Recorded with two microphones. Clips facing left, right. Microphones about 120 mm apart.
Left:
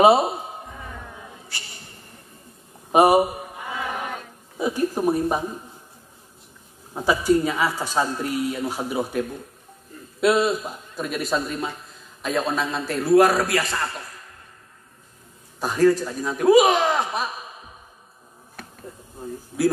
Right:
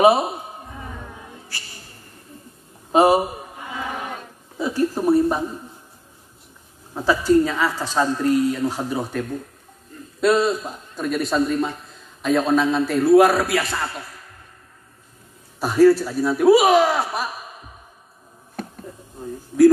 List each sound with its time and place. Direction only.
0.0 s a man's voice: 30° left (ahead or behind)
2.9 s speech: 15° left (ahead or behind)
4.6 s a sound: 15° left (ahead or behind)
6.9 s a woman's voice: 15° left (ahead or behind)
15.6 s a man's voice: 10° right (ahead or behind)